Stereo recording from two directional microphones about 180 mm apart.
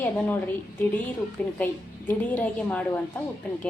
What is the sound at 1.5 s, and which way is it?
A woman's voice, 10° left (ahead or behind).